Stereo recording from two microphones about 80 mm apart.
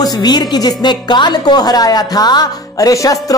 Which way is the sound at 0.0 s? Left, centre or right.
Left.